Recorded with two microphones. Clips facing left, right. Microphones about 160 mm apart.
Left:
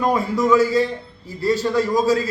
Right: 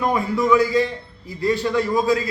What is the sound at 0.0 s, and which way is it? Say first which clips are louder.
A man's voice: left 1 dB; 40° left (ahead or behind).